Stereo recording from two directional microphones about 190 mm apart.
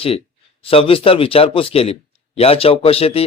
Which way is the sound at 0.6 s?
30° left (ahead or behind).